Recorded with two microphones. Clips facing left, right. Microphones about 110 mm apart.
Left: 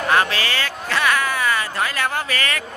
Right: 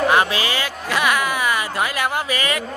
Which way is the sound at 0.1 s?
15° right (ahead or behind).